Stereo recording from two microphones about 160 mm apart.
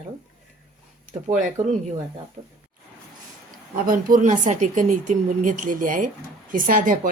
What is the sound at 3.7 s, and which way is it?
Speech, 60° right (ahead or behind).